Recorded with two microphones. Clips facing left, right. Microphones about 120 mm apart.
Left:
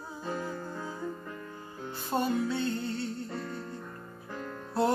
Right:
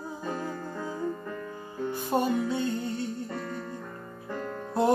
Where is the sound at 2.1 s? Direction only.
15° right (ahead or behind).